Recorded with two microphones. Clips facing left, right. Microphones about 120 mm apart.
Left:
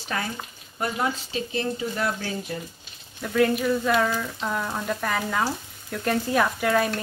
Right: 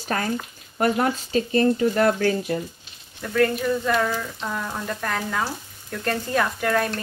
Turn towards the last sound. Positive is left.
turn(degrees=5)  # may be behind; listen again after turning